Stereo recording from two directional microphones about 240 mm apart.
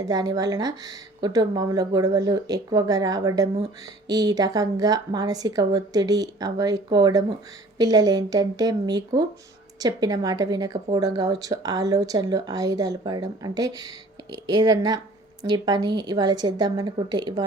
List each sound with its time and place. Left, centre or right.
0.0 s a woman's voice: centre